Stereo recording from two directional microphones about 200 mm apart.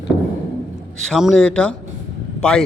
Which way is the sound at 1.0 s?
Centre (ahead or behind).